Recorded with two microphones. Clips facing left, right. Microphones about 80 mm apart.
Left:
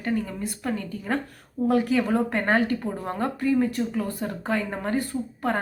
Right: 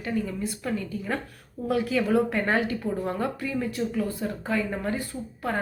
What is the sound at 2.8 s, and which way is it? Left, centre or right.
Speech, left.